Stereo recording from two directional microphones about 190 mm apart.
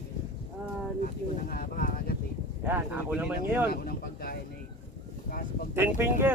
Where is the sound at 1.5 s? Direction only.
50° left (ahead or behind).